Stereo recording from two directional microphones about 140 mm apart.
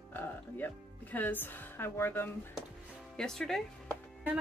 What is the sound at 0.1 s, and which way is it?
Speech, 15° left (ahead or behind).